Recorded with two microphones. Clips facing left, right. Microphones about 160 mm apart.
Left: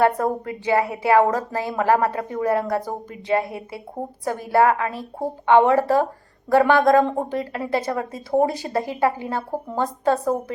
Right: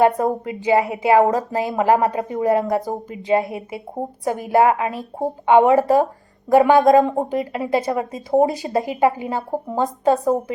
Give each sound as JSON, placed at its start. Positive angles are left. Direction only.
{"t": 0.2, "sound": "a woman's voice", "side_deg": -20}